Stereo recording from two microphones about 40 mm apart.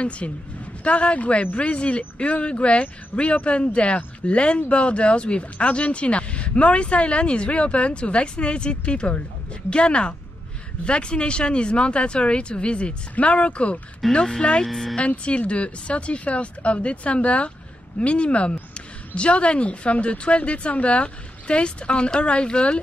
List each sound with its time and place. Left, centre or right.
0.0 s speech: left
14.1 s speech: centre
14.6 s speech: centre
15.0 s speech: left